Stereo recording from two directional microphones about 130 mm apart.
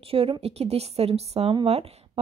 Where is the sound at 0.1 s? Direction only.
50° right (ahead or behind).